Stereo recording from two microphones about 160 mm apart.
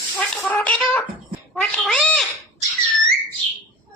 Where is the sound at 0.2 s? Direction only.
10° left (ahead or behind).